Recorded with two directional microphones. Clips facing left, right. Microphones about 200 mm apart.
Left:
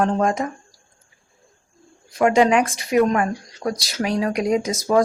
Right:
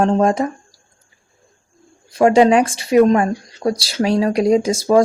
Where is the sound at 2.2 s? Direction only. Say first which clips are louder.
Right 4 dB; 30° right (ahead or behind).